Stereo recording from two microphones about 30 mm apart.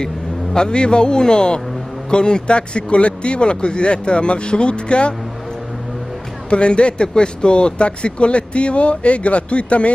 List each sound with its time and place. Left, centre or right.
0.0 s a man's voice: left
6.5 s speech: left